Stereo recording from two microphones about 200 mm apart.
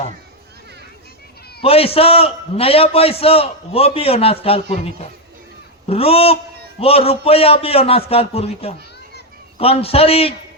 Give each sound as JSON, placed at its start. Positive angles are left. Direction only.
{"t": 1.6, "sound": "a man's voice", "side_deg": 30}
{"t": 5.9, "sound": "a man's voice", "side_deg": 30}